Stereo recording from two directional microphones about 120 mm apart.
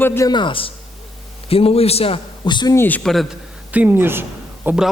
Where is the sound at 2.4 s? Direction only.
40° left (ahead or behind).